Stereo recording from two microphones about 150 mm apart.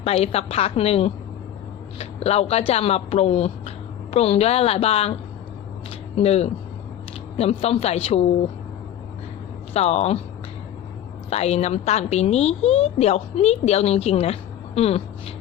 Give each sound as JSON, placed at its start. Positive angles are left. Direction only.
{"t": 0.0, "sound": "a woman's voice", "side_deg": 45}
{"t": 6.1, "sound": "a woman's voice", "side_deg": 45}
{"t": 9.7, "sound": "a woman's voice", "side_deg": 45}
{"t": 11.3, "sound": "a woman's voice", "side_deg": 45}